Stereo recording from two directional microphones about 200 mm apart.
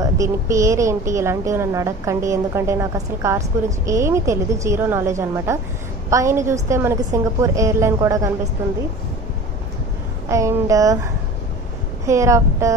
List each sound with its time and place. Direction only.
0.0 s a woman's voice: 15° right (ahead or behind)
10.2 s a woman's voice: 15° right (ahead or behind)
12.1 s a woman's voice: 15° right (ahead or behind)